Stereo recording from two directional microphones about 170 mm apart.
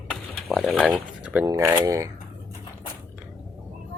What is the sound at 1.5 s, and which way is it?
Speech, 20° right (ahead or behind).